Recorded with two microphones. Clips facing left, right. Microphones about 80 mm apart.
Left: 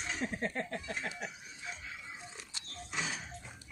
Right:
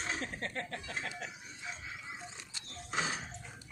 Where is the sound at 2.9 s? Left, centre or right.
Right.